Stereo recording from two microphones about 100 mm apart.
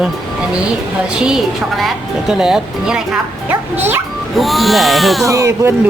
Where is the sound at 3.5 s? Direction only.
20° right (ahead or behind).